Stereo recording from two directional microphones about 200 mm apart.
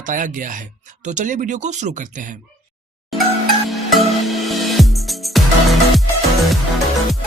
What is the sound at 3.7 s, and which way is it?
Music, centre (ahead or behind).